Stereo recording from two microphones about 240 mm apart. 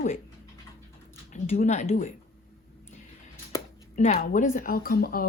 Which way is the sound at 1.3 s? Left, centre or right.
Left.